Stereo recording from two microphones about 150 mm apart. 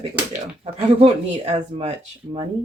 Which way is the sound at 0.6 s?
45° right (ahead or behind).